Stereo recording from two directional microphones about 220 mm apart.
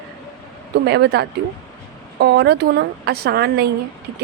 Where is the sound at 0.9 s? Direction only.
50° right (ahead or behind).